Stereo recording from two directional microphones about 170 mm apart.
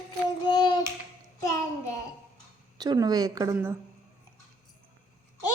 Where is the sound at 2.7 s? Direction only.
20° right (ahead or behind).